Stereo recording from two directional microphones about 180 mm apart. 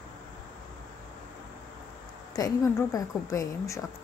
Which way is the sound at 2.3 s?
20° left (ahead or behind).